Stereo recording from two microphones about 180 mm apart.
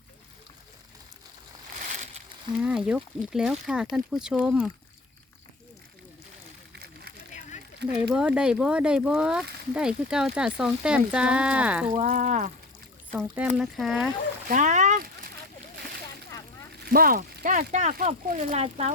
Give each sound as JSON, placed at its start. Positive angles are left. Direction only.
{"t": 1.8, "sound": "a sound", "side_deg": -40}
{"t": 2.6, "sound": "speech", "side_deg": -5}
{"t": 8.1, "sound": "speech", "side_deg": -5}
{"t": 11.9, "sound": "speech", "side_deg": -45}
{"t": 13.1, "sound": "speech", "side_deg": -10}
{"t": 14.4, "sound": "speech", "side_deg": -45}
{"t": 16.9, "sound": "speech", "side_deg": -55}